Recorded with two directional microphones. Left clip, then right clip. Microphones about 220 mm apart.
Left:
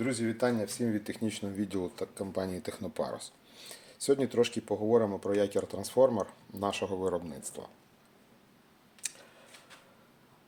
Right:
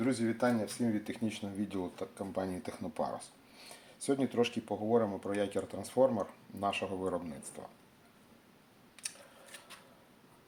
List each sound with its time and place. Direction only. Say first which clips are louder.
0.0 s speech: left 1 dB; 35° left (ahead or behind)